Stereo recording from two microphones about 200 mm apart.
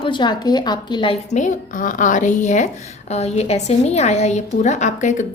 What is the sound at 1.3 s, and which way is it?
A woman's voice, 40° left (ahead or behind).